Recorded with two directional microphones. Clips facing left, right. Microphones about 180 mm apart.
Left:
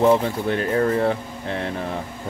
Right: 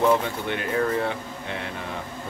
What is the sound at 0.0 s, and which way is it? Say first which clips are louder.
Speech: left 4 dB; 35° left (ahead or behind).